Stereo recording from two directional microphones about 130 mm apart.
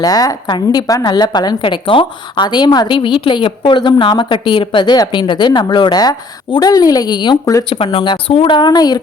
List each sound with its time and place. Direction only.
0.0 s a woman's voice: 30° left (ahead or behind)